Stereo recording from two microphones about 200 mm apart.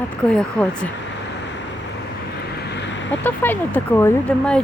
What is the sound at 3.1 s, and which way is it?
Speech, 10° left (ahead or behind).